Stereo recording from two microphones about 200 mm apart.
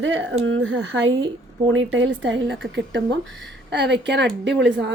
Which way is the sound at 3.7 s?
60° right (ahead or behind).